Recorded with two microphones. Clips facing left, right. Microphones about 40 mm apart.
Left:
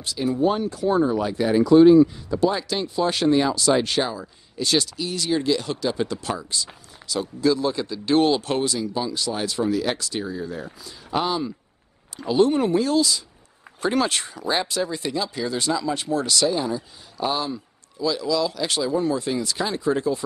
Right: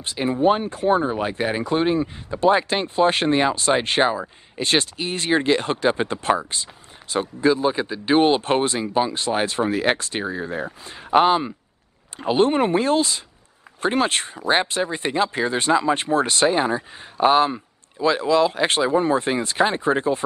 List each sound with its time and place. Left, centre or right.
0.0 s speech: right